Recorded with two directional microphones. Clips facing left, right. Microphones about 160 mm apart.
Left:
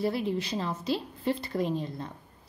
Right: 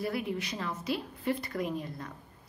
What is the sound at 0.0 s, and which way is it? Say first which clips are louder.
A woman's voice: left 4 dB; 30° left (ahead or behind).